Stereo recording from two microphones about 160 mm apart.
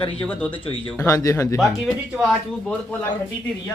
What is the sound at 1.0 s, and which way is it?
Speech, 20° left (ahead or behind).